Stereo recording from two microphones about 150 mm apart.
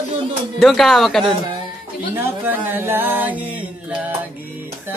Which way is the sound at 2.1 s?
15° right (ahead or behind).